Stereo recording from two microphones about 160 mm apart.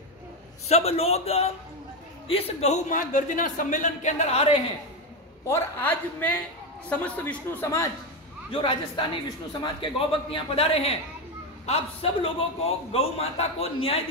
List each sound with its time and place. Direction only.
0.7 s a man's voice: 40° left (ahead or behind)
5.5 s a man's voice: 15° left (ahead or behind)
8.5 s a man's voice: 30° left (ahead or behind)